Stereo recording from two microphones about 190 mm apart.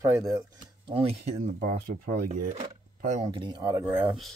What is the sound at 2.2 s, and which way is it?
Speech, 40° right (ahead or behind).